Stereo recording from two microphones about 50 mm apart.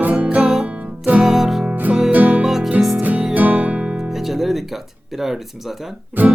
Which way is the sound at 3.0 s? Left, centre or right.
Right.